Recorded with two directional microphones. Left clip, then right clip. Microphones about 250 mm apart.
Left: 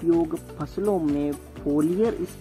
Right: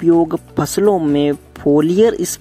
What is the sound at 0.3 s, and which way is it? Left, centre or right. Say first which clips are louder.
Speech: right 13 dB; right.